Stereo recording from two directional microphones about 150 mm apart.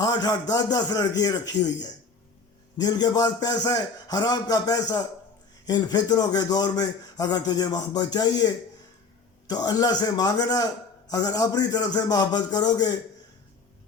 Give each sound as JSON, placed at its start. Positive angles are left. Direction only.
{"t": 0.0, "sound": "a man's voice", "side_deg": 25}